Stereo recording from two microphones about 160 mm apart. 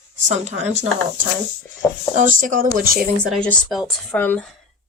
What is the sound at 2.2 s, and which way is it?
Speech, 55° right (ahead or behind).